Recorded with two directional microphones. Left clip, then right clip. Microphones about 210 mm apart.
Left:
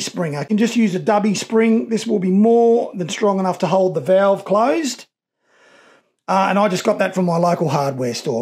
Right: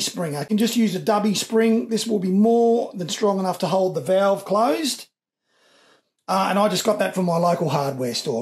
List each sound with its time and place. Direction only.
0.0 s speech: 45° left (ahead or behind)
6.2 s speech: 45° left (ahead or behind)